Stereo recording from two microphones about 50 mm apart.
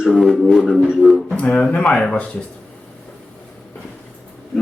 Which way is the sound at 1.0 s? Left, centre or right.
Right.